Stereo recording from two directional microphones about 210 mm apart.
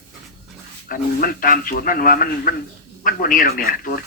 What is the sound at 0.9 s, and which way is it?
A man's voice, 45° left (ahead or behind).